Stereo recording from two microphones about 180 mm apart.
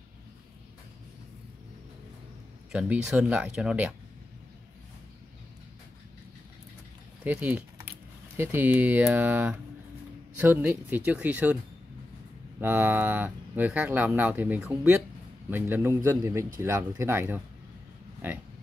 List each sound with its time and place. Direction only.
2.7 s speech: 5° right (ahead or behind)
7.2 s speech: 10° right (ahead or behind)
12.5 s speech: 10° right (ahead or behind)